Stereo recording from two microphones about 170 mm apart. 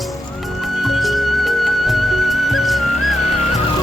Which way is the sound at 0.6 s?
Centre (ahead or behind).